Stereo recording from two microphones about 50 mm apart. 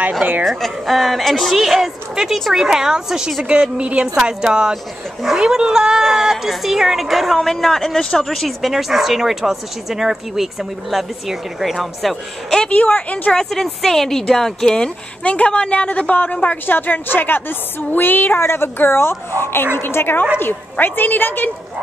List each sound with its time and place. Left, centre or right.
0.5 s a woman's voice: centre
3.4 s a woman's voice: centre
12.7 s a woman's voice: left
13.3 s a woman's voice: centre
15.2 s a woman's voice: left
20.7 s a woman's voice: left